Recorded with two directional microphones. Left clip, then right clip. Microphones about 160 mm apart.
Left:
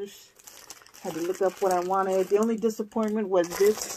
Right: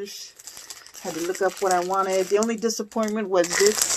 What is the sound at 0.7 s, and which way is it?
Speech, 15° right (ahead or behind).